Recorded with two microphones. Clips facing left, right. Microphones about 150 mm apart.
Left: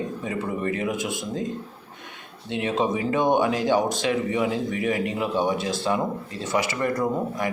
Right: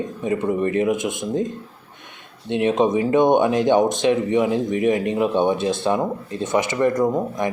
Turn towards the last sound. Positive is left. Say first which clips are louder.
# right 5 dB
turn(degrees=-20)  # may be behind; listen again after turning